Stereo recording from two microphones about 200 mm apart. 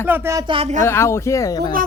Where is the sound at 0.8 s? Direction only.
15° left (ahead or behind).